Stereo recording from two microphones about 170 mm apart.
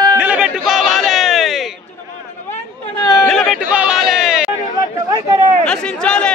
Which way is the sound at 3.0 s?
20° left (ahead or behind).